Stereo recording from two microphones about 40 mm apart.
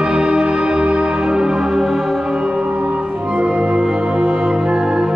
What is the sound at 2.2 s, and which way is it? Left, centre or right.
Music, right.